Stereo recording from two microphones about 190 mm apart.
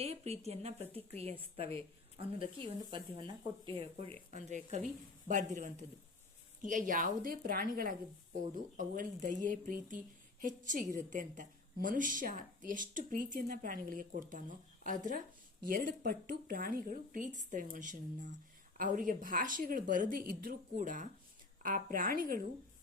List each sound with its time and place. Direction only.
0.0 s speech: 35° right (ahead or behind)
2.9 s a woman's voice: 25° right (ahead or behind); by 22.4 s 50° right (ahead or behind)